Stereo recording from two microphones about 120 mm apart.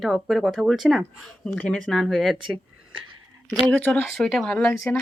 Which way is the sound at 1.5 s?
15° left (ahead or behind).